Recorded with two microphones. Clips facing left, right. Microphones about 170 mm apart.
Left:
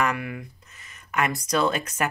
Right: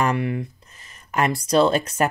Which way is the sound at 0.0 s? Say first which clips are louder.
Right 4 dB; 30° right (ahead or behind).